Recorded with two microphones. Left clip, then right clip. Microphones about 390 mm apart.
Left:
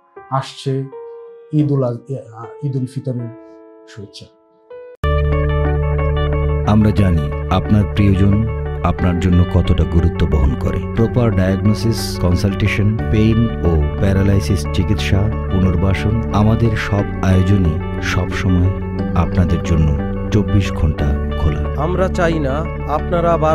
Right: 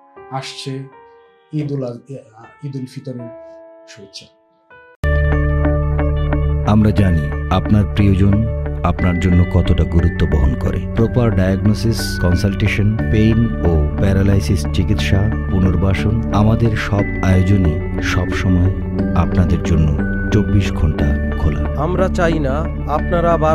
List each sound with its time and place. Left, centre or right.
1.5 s speech: left
5.0 s speech: centre